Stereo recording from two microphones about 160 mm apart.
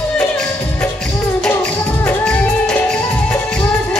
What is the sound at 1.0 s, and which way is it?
Music, 5° left (ahead or behind).